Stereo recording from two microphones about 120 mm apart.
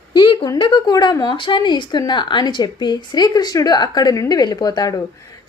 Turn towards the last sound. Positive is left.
turn(degrees=30)  # may be behind; listen again after turning